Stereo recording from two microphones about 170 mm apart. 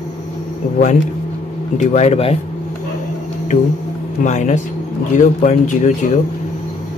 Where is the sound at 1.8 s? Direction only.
45° left (ahead or behind).